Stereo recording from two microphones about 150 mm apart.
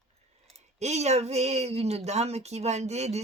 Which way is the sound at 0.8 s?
50° right (ahead or behind).